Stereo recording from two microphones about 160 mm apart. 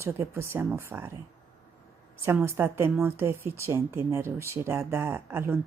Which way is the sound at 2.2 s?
15° right (ahead or behind).